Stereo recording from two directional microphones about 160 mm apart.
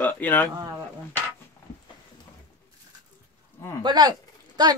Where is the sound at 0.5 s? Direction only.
25° right (ahead or behind).